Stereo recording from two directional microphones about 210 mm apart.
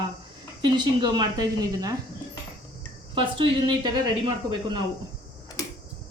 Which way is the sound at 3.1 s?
25° right (ahead or behind).